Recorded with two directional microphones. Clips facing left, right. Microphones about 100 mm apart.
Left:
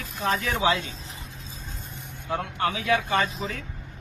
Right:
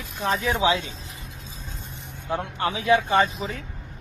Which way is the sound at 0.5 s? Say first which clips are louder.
Right 2 dB; 40° left (ahead or behind).